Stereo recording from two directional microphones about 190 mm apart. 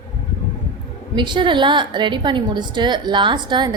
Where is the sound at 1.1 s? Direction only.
25° right (ahead or behind).